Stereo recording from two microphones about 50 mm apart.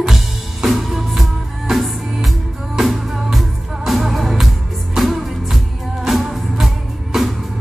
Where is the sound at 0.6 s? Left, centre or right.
Centre.